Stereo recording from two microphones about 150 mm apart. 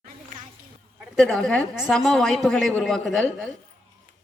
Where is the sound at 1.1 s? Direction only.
Centre (ahead or behind).